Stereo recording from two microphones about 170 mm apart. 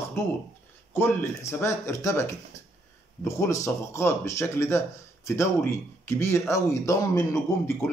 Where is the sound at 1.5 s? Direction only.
15° left (ahead or behind).